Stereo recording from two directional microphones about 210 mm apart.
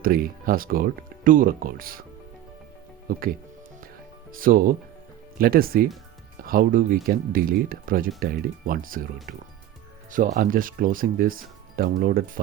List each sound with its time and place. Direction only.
0.0 s speech: 45° right (ahead or behind)
3.1 s speech: 40° right (ahead or behind)
4.4 s speech: 40° right (ahead or behind)
10.1 s speech: 40° right (ahead or behind)